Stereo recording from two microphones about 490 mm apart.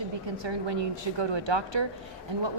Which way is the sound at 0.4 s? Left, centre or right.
Right.